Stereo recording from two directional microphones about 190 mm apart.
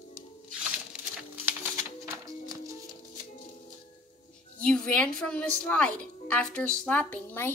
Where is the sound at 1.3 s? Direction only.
10° right (ahead or behind).